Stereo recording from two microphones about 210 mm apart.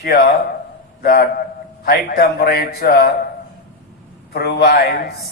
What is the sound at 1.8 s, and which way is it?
A man's voice, 45° left (ahead or behind).